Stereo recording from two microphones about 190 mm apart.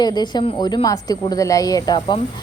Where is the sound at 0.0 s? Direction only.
20° left (ahead or behind).